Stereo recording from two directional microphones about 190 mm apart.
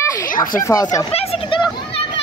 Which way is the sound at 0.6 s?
20° left (ahead or behind).